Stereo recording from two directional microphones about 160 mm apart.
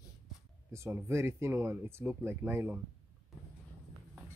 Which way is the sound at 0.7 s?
15° right (ahead or behind).